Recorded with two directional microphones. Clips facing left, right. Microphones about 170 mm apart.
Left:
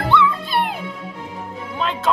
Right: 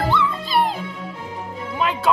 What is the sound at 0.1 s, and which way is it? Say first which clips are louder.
Music: left 2 dB; 60° left (ahead or behind).